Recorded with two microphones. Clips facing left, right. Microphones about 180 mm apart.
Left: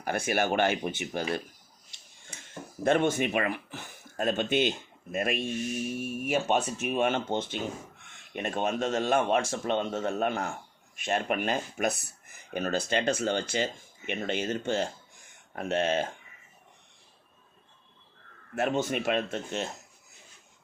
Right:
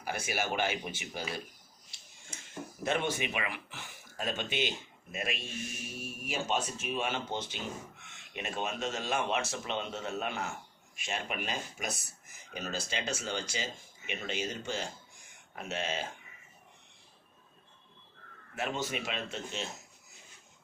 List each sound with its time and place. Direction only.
0.0 s speech: 55° left (ahead or behind)
2.8 s speech: 50° left (ahead or behind)
18.5 s speech: 50° left (ahead or behind)